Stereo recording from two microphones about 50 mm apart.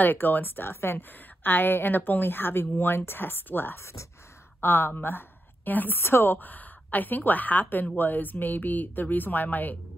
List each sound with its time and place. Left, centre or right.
0.0 s a woman's voice: left